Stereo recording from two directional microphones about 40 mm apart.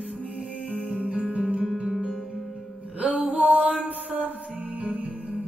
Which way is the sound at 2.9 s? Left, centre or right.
Right.